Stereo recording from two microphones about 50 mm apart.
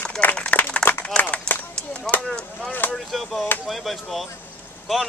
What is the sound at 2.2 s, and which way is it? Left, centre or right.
Speech, centre.